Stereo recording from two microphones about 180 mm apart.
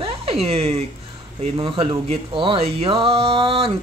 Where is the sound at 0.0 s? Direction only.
35° right (ahead or behind).